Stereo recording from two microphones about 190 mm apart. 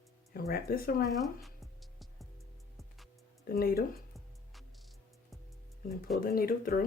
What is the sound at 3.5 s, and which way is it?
Speech, 50° left (ahead or behind).